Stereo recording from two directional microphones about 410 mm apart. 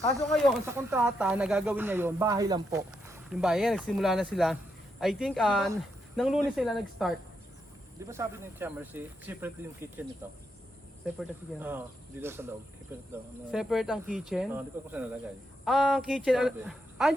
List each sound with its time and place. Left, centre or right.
0.3 s speech: centre
11.2 s speech: centre